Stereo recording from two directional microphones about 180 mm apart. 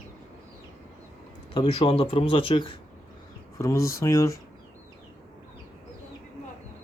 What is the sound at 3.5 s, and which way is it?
Speech, 15° left (ahead or behind).